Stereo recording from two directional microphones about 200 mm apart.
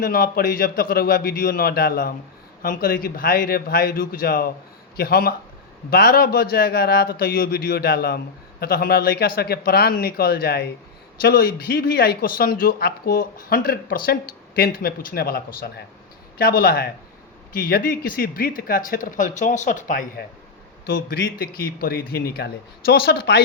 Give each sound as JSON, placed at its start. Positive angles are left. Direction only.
{"t": 0.0, "sound": "speech", "side_deg": 45}
{"t": 16.4, "sound": "speech", "side_deg": 50}